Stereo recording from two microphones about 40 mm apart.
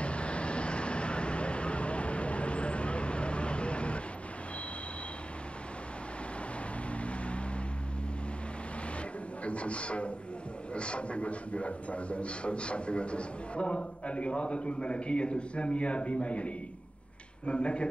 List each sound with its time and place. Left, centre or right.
0.0 s vehicle: left
6.9 s vehicle: left
9.4 s a man's voice: left